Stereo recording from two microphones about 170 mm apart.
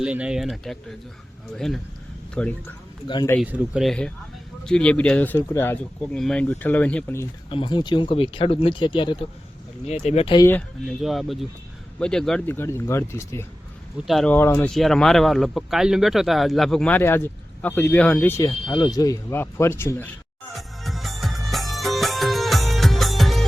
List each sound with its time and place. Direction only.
0.0 s speech: 5° right (ahead or behind)
3.4 s speech: 5° right (ahead or behind); by 7.3 s 10° left (ahead or behind)
7.5 s speech: 30° left (ahead or behind)
9.8 s speech: 40° left (ahead or behind)
10.3 s speech: 15° left (ahead or behind)
10.8 s speech: centre (ahead or behind)
14.0 s speech: centre (ahead or behind)
14.7 s speech: centre (ahead or behind)
20.5 s music: centre (ahead or behind)